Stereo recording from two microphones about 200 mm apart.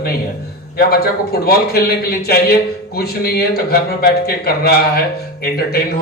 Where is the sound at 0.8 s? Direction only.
50° left (ahead or behind).